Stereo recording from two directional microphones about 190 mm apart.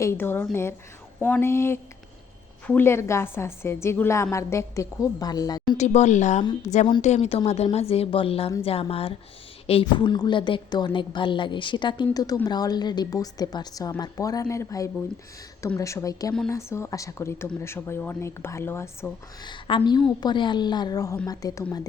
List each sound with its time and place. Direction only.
0.0 s a woman's voice: 10° left (ahead or behind)
5.7 s a woman's voice: 35° left (ahead or behind); by 19.1 s 10° left (ahead or behind)
19.5 s a woman's voice: 25° left (ahead or behind)